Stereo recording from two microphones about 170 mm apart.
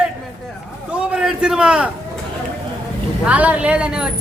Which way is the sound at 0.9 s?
5° right (ahead or behind).